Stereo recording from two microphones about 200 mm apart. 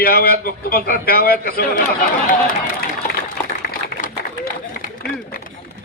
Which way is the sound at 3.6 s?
50° left (ahead or behind).